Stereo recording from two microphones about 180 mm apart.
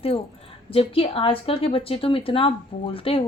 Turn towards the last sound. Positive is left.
turn(degrees=30)  # may be behind; listen again after turning